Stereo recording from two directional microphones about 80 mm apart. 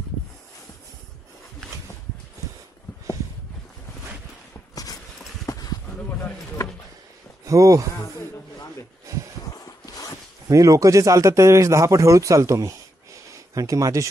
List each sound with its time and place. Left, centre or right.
5.5 s a sound: left
7.4 s speech: right
9.5 s zipper: left
10.5 s speech: right